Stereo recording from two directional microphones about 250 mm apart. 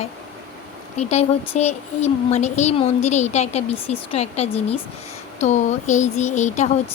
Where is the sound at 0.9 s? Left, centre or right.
Left.